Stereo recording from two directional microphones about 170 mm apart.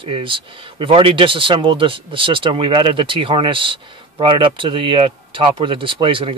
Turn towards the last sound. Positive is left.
turn(degrees=-30)  # may be behind; listen again after turning